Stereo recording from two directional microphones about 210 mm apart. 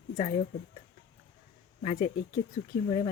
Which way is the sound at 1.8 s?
30° left (ahead or behind).